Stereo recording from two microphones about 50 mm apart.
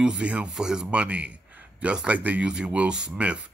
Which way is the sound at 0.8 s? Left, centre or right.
Right.